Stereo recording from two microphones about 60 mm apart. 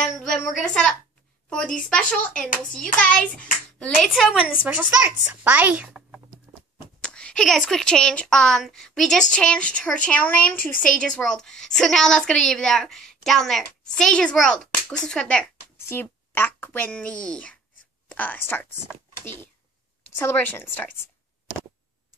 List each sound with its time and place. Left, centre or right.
0.0 s music: centre
1.5 s a woman's voice: centre
4.1 s a woman's voice: centre
4.5 s a woman's voice: right
7.0 s a sound: centre
7.4 s a woman's voice: centre
15.9 s a woman's voice: left